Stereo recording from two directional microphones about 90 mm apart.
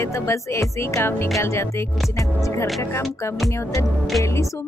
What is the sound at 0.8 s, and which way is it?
Music, 30° left (ahead or behind).